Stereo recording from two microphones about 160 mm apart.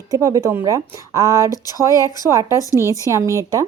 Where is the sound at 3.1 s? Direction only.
20° right (ahead or behind).